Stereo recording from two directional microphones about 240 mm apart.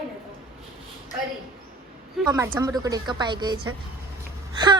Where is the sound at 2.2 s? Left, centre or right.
Centre.